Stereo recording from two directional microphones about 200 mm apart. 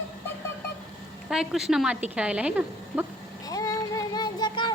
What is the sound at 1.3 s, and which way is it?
A woman's voice, centre (ahead or behind).